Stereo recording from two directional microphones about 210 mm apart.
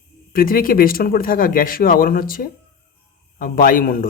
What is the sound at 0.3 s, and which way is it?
Speech, 45° left (ahead or behind).